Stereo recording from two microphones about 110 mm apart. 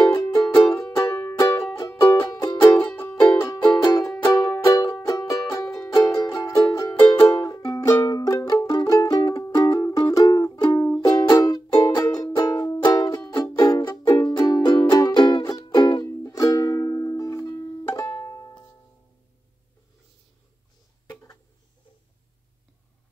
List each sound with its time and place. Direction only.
0.0 s music: 35° left (ahead or behind)
1.4 s music: 35° left (ahead or behind)
21.1 s a sound: 30° left (ahead or behind)